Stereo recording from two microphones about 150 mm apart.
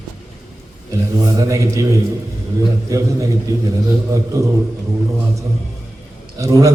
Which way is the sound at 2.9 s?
25° right (ahead or behind).